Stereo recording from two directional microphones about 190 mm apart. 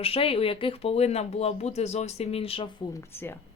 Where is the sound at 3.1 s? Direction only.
10° left (ahead or behind).